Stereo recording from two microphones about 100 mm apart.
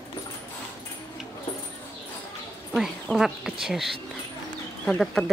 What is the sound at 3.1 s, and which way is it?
Speech, 5° right (ahead or behind).